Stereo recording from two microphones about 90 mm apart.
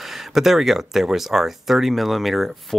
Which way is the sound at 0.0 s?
5° right (ahead or behind).